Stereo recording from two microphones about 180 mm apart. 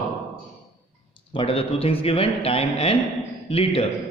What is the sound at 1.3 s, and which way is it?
A man's voice, 30° left (ahead or behind).